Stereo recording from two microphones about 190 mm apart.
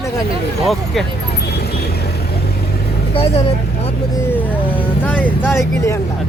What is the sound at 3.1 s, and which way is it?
Speech, 30° left (ahead or behind).